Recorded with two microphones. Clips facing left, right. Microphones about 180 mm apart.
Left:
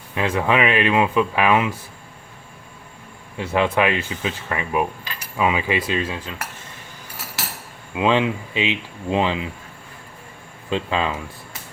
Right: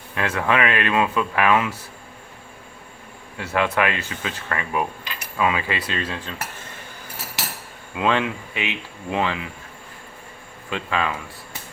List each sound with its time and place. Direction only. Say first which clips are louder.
0.1 s speech: left 2 dB; 20° left (ahead or behind)
3.3 s speech: left 2 dB; 20° left (ahead or behind)
7.9 s speech: left 3 dB; 20° left (ahead or behind)
10.7 s speech: left 2 dB; 25° left (ahead or behind)